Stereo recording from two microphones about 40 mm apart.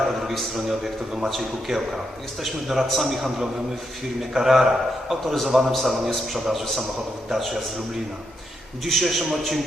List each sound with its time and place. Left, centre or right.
0.2 s a man's voice: centre
5.2 s a man's voice: centre
8.8 s a man's voice: centre